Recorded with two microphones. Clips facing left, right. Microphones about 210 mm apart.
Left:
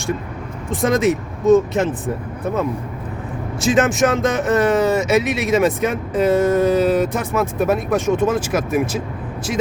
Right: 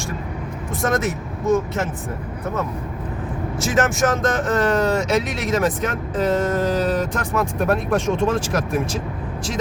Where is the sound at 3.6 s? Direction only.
15° left (ahead or behind).